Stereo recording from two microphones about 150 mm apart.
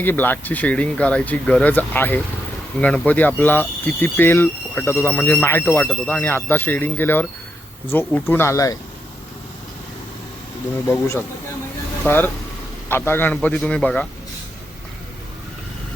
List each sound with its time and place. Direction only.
0.0 s speech: 15° left (ahead or behind)
10.8 s speech: 15° left (ahead or behind)